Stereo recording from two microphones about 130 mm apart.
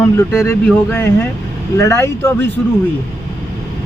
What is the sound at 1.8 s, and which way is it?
Speech, 25° left (ahead or behind).